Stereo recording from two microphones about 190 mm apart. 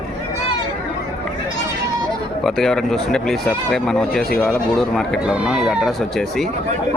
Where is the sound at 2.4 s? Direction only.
Centre (ahead or behind).